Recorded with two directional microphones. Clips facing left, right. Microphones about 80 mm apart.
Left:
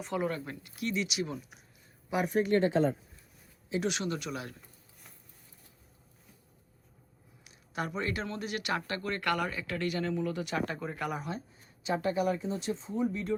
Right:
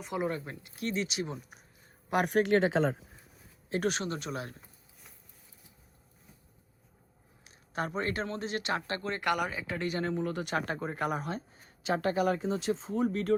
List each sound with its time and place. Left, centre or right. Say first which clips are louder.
0.1 s speech: even; right
0.8 s speech: even; right
2.0 s speech: right 2 dB; right
3.7 s speech: right 1 dB; right
7.4 s speech: right 1 dB; right
11.8 s speech: right 1 dB; right